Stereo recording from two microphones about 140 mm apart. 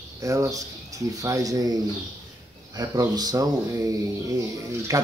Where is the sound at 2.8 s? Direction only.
30° right (ahead or behind).